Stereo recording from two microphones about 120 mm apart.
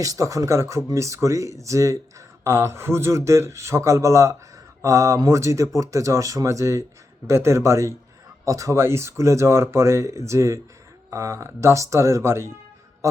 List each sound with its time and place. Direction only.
0.0 s speech: 30° right (ahead or behind)